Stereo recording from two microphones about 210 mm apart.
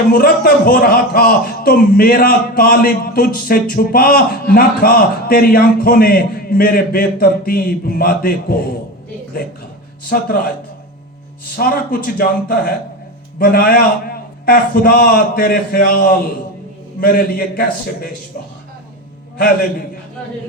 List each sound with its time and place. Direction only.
0.1 s a man's voice: 45° left (ahead or behind)
10.1 s a man's voice: 45° left (ahead or behind)
11.5 s a man's voice: 45° left (ahead or behind)